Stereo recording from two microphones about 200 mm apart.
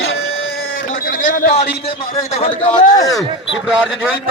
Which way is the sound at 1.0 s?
40° left (ahead or behind).